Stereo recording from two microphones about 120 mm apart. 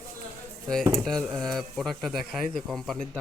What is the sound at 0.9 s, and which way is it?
Speech, 5° left (ahead or behind).